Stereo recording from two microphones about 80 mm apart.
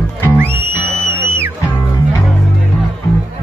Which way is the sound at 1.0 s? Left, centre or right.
Left.